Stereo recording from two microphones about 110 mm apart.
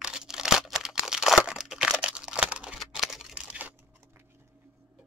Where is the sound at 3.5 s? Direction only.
15° right (ahead or behind).